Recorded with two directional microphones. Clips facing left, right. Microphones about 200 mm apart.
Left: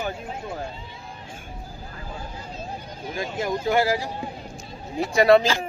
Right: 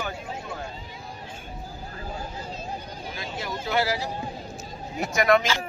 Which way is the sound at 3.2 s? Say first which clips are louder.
Left 8 dB; 45° left (ahead or behind).